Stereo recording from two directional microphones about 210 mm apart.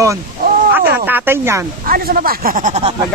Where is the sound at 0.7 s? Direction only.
10° right (ahead or behind).